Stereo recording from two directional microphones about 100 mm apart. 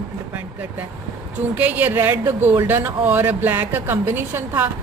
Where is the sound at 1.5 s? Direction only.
20° right (ahead or behind).